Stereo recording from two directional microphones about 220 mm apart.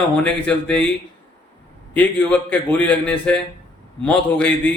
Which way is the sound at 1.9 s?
5° left (ahead or behind).